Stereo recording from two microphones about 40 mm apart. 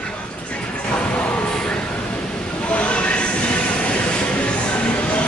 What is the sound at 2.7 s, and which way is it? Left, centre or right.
Train, left.